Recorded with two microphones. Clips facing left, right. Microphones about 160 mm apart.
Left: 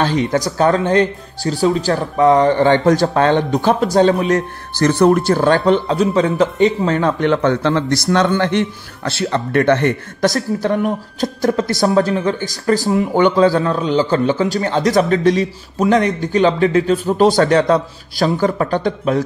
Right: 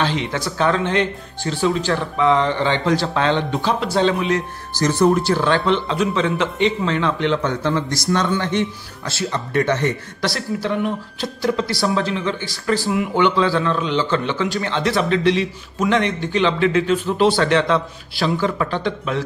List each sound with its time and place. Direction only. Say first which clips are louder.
0.0 s speech: left 5 dB; 45° left (ahead or behind)
4.7 s speech: left 4 dB; 60° left (ahead or behind); by 19.2 s 40° left (ahead or behind)